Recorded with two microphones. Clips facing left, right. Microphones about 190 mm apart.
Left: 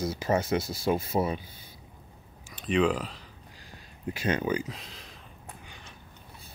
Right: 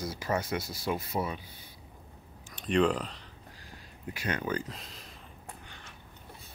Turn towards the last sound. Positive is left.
turn(degrees=0)  # may be behind; listen again after turning